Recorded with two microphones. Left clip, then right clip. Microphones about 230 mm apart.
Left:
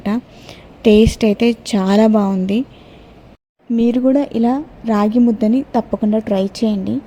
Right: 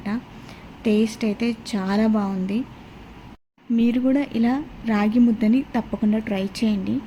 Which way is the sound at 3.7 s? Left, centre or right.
Centre.